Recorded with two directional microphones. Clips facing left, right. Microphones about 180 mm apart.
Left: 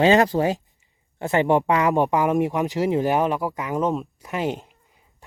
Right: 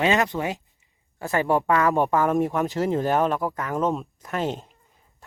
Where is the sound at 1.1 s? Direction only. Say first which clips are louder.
Left 3 dB; 20° left (ahead or behind).